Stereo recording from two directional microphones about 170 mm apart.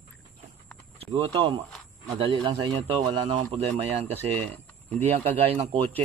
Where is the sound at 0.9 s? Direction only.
35° right (ahead or behind).